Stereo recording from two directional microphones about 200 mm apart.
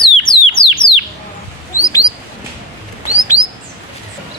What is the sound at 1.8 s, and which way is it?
Bird, 15° left (ahead or behind).